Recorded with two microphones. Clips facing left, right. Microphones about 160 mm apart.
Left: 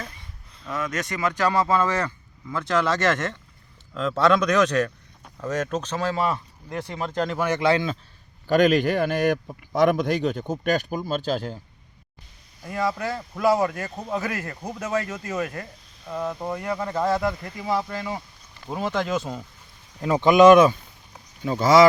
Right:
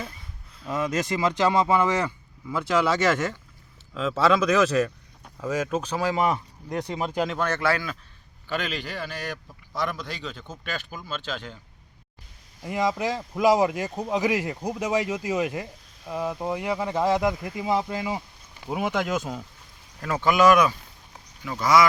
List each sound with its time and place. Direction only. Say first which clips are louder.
0.7 s speech: right 3 dB; 25° right (ahead or behind)
7.3 s speech: left 3 dB; 10° left (ahead or behind)
8.4 s a man's voice: left 12 dB; 45° left (ahead or behind)
12.6 s speech: right 1 dB; 15° right (ahead or behind)
20.0 s speech: left 6 dB; 20° left (ahead or behind)